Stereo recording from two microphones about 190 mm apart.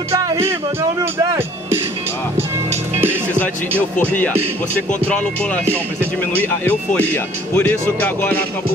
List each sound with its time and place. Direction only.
0.1 s speech: 15° right (ahead or behind)
4.0 s speech: 10° left (ahead or behind)
6.6 s speech: 10° left (ahead or behind)